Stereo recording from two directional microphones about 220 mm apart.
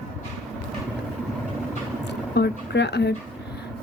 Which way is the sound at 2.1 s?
50° left (ahead or behind).